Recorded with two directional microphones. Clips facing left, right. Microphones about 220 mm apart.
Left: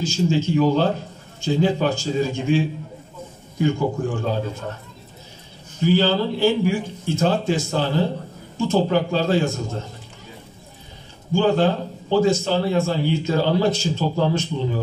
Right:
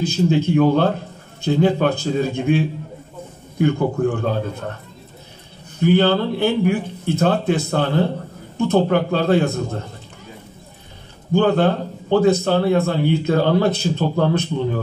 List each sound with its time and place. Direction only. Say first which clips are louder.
0.0 s a man's voice: right 3 dB; 60° right (ahead or behind)
5.8 s a man's voice: right 3 dB; 60° right (ahead or behind)
11.3 s a man's voice: right 2 dB; 60° right (ahead or behind)